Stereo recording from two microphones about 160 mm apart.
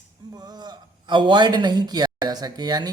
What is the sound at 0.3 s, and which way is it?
A woman's voice, 25° right (ahead or behind).